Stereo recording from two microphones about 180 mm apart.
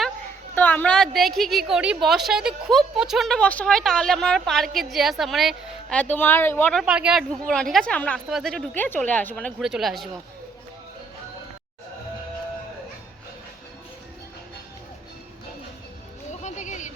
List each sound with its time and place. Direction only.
0.5 s a woman's voice: 10° left (ahead or behind)
6.8 s speech: 5° right (ahead or behind)
16.3 s a sound: 40° left (ahead or behind)